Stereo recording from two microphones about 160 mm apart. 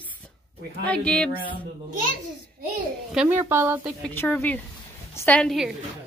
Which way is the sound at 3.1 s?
10° right (ahead or behind).